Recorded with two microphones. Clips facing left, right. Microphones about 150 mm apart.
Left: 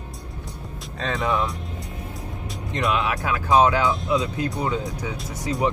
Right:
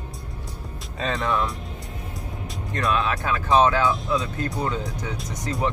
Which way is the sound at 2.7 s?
20° left (ahead or behind).